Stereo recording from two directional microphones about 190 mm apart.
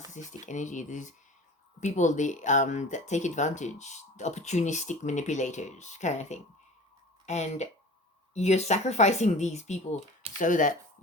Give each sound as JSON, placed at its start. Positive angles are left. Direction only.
{"t": 0.1, "sound": "speech", "side_deg": 40}